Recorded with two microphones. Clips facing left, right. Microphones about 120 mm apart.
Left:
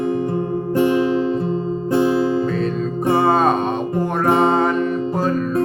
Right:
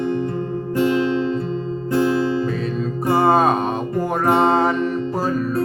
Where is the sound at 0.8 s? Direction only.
15° left (ahead or behind).